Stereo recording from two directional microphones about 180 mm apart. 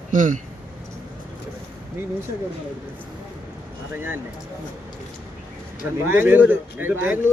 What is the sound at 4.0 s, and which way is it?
Speech, 10° right (ahead or behind).